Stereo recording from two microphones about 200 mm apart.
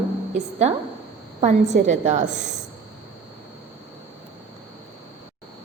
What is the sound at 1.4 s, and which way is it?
Speech, 35° right (ahead or behind).